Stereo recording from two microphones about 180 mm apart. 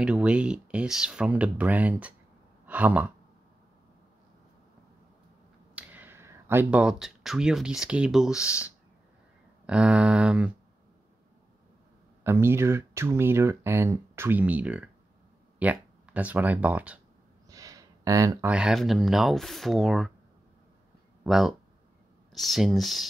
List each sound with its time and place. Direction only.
0.0 s speech: 5° right (ahead or behind)
5.8 s speech: 10° right (ahead or behind)
9.7 s speech: 5° right (ahead or behind)
12.2 s speech: 15° right (ahead or behind)
17.5 s a sound: 20° right (ahead or behind)
18.5 s speech: 5° right (ahead or behind)
21.2 s speech: centre (ahead or behind)